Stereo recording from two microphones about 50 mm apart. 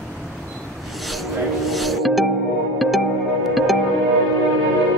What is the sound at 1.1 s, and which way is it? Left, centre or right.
Music, centre.